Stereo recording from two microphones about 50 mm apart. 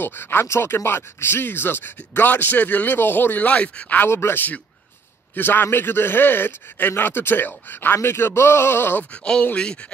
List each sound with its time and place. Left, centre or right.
0.0 s a man's voice: left
3.4 s speech: left
4.1 s a man's voice: left
5.3 s a man's voice: left
9.1 s speech: left